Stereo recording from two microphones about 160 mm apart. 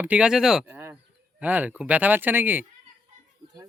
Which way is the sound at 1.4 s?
10° right (ahead or behind).